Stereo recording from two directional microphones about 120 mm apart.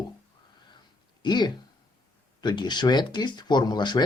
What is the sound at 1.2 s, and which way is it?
Speech, 35° left (ahead or behind).